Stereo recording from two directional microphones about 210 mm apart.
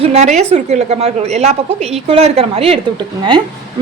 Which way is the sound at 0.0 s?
30° right (ahead or behind).